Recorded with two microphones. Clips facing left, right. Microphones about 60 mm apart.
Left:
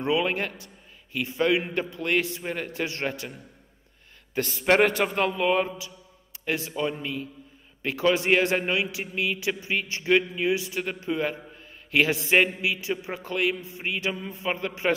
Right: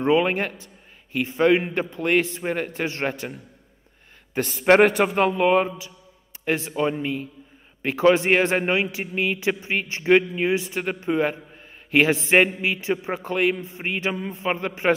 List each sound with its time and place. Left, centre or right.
0.0 s a man's voice: right
4.8 s a man's voice: centre; by 15.0 s right